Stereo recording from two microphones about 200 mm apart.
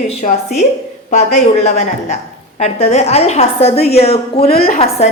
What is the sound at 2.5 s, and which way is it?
Speech, 30° left (ahead or behind).